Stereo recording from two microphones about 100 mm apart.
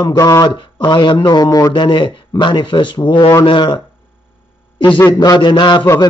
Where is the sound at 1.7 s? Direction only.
50° left (ahead or behind).